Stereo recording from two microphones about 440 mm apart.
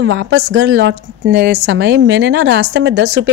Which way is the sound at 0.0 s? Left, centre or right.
Right.